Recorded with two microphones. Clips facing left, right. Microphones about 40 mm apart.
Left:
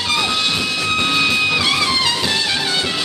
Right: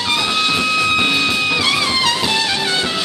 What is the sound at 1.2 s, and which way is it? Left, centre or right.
Music, centre.